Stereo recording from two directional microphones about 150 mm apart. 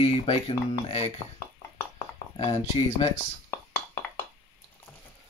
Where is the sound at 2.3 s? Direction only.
45° left (ahead or behind).